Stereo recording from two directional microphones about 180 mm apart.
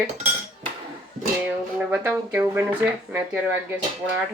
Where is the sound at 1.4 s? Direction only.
10° right (ahead or behind).